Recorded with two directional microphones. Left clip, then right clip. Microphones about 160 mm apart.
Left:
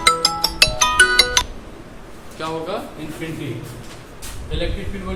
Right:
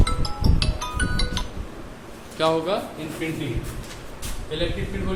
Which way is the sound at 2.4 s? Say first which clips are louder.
Right 6 dB; 90° right.